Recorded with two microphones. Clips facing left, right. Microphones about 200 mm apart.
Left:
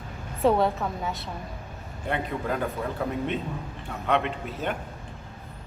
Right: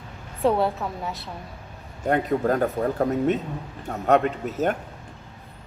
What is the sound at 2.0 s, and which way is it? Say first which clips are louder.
Speech: right 7 dB; 45° right (ahead or behind).